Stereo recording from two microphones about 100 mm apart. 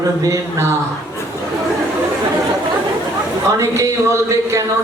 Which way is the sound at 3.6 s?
30° right (ahead or behind).